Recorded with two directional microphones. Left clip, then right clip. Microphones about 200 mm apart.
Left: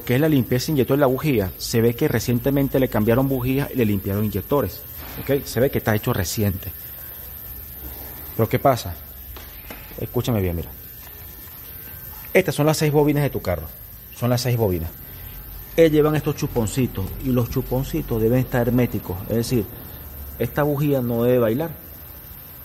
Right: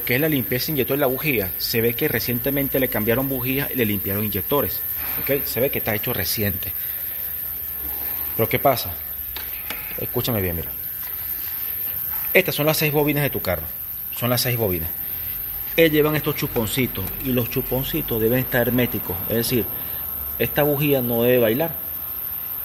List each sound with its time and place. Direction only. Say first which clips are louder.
0.0 s speech: left 1 dB; 20° left (ahead or behind)
4.0 s a man's voice: left 1 dB; centre (ahead or behind)
5.5 s speech: left 2 dB; 25° left (ahead or behind)
6.3 s speech: even; 15° left (ahead or behind)
8.4 s speech: even; 15° left (ahead or behind)
9.9 s speech: left 1 dB; 10° left (ahead or behind)
12.3 s a man's voice: even; 15° left (ahead or behind); by 21.6 s centre (ahead or behind)